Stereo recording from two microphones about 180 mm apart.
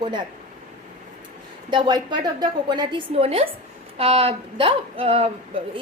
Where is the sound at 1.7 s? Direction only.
25° right (ahead or behind).